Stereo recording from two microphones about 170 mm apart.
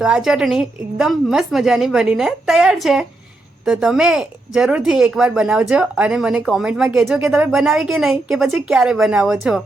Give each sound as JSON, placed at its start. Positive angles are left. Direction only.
{"t": 0.0, "sound": "speech", "side_deg": -5}
{"t": 7.3, "sound": "speech", "side_deg": -10}
{"t": 7.5, "sound": "speech", "side_deg": 0}